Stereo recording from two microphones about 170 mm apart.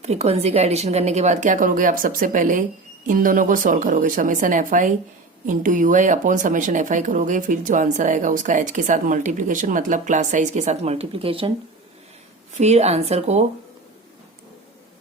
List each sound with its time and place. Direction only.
0.0 s speech: 40° right (ahead or behind)
12.5 s speech: 40° right (ahead or behind)